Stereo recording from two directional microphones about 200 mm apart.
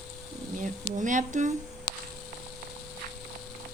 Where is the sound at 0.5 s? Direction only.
40° right (ahead or behind).